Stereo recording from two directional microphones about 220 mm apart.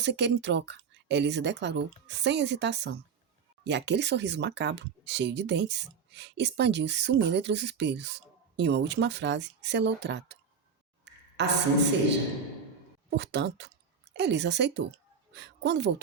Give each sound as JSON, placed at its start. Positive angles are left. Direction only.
{"t": 0.0, "sound": "speech", "side_deg": -50}
{"t": 11.0, "sound": "a sound", "side_deg": -50}
{"t": 13.1, "sound": "a woman's voice", "side_deg": -50}